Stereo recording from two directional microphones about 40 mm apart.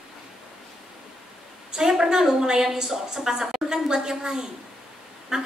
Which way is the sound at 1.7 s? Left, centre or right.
Centre.